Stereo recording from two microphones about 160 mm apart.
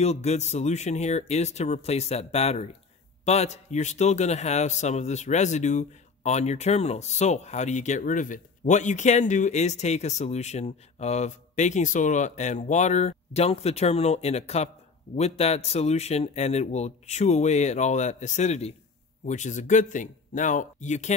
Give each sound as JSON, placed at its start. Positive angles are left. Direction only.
{"t": 0.0, "sound": "a man's voice", "side_deg": 45}